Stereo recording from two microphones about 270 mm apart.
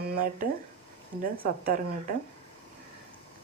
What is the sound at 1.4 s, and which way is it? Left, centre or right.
Speech, right.